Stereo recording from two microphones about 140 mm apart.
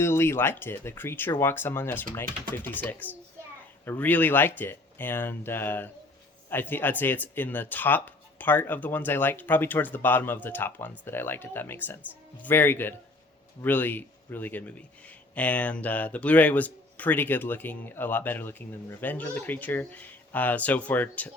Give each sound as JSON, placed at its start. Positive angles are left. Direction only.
{"t": 0.0, "sound": "a man's voice", "side_deg": 15}